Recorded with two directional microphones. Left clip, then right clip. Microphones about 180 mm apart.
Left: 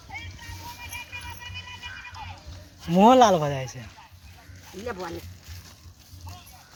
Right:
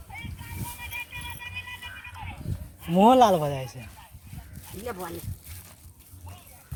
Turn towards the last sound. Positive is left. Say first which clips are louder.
# left 2 dB
turn(degrees=-55)  # may be behind; listen again after turning